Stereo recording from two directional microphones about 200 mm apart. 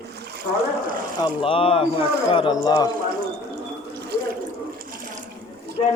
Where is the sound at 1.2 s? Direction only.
25° left (ahead or behind).